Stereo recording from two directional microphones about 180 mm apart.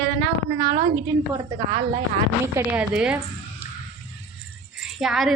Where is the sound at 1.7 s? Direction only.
30° right (ahead or behind).